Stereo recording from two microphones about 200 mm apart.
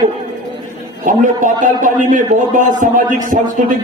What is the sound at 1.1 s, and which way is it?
A man's voice, 40° right (ahead or behind).